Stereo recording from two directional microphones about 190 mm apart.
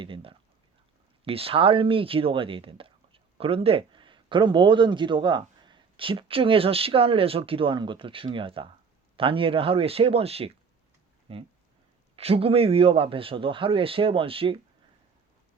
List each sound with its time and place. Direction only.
0.0 s a man's voice: 30° right (ahead or behind)